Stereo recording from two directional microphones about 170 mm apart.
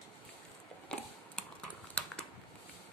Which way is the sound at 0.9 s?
5° left (ahead or behind).